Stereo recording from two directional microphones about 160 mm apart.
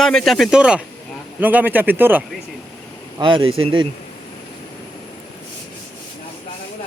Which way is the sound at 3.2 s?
30° right (ahead or behind).